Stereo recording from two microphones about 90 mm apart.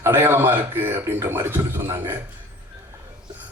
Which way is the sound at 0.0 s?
25° right (ahead or behind).